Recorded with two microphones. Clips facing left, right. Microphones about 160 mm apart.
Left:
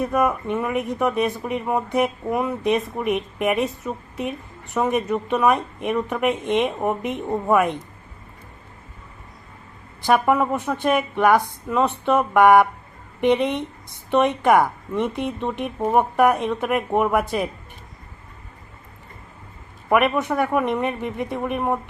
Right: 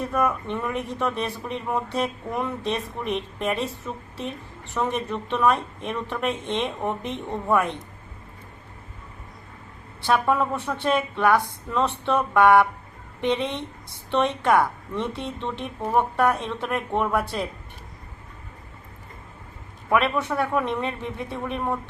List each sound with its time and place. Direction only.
0.1 s speech: 15° left (ahead or behind)
10.1 s speech: 15° left (ahead or behind)
19.9 s speech: 15° left (ahead or behind)